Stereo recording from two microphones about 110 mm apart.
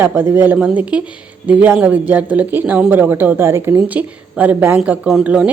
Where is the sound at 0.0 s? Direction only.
20° right (ahead or behind).